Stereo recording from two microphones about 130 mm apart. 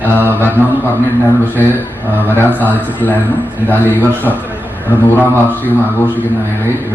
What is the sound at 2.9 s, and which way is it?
A man's voice, 15° left (ahead or behind).